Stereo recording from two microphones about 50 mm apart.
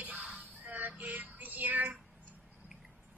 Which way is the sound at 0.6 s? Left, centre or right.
Right.